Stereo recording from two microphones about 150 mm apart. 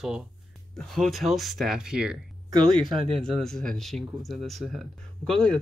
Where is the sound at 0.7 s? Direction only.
Centre (ahead or behind).